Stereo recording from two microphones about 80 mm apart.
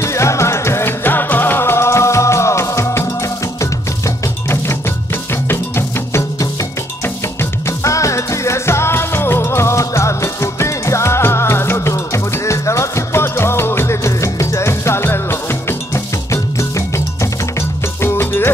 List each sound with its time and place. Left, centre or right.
0.0 s music: left
5.3 s music: left
7.6 s music: left